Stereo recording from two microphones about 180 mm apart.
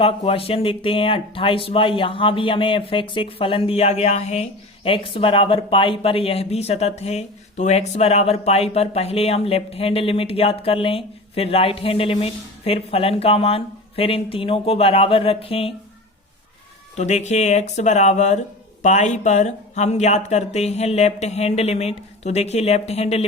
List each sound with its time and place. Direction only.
0.0 s speech: 30° left (ahead or behind)
17.0 s speech: 40° left (ahead or behind)